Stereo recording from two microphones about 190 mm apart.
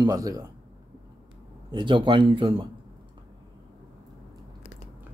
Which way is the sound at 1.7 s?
25° right (ahead or behind).